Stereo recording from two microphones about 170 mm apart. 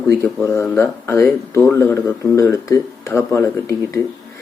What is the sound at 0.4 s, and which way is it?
Speech, 15° left (ahead or behind).